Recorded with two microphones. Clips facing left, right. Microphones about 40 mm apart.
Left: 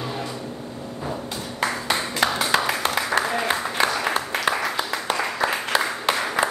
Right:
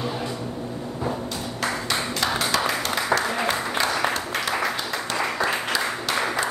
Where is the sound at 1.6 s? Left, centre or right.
Centre.